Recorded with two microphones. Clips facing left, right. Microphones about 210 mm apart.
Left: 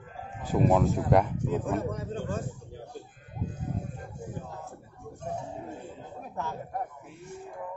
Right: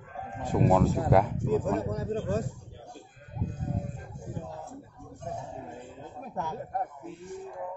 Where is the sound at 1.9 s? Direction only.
35° right (ahead or behind).